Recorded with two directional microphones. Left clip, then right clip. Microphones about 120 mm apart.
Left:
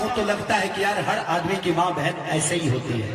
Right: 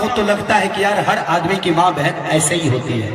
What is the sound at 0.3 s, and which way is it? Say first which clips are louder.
A man's voice: right 7 dB; 25° right (ahead or behind).